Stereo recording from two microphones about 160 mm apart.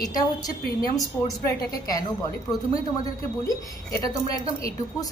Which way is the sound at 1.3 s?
20° left (ahead or behind).